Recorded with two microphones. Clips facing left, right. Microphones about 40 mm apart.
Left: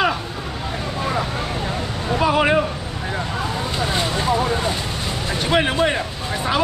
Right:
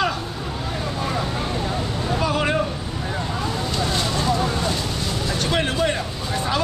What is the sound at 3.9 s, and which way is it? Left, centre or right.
Speech, left.